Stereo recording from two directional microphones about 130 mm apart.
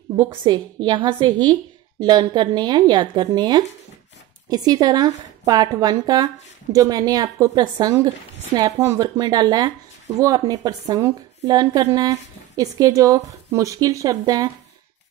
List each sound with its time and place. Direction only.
0.3 s a woman's voice: 35° right (ahead or behind)